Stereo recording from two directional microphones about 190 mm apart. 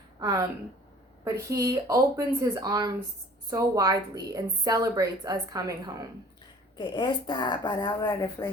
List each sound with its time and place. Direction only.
1.2 s a woman's voice: 15° right (ahead or behind)
6.7 s speech: 25° left (ahead or behind)